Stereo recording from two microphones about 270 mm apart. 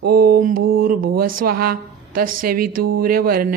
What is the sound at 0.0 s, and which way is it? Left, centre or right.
Speech, right.